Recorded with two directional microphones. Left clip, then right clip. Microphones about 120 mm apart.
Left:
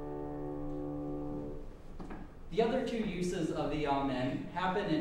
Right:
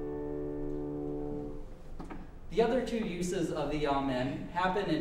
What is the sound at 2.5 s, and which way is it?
A man's voice, 25° right (ahead or behind).